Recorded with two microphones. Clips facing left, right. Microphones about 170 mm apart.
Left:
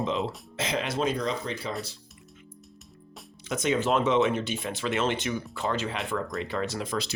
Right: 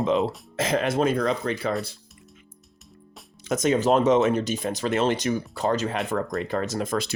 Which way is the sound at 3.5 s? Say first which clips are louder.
Right 5 dB; 40° right (ahead or behind).